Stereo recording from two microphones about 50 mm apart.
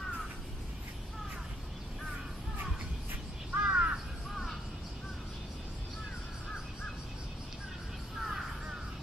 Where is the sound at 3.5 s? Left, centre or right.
Right.